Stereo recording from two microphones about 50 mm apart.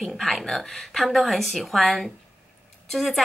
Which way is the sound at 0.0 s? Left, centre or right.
Centre.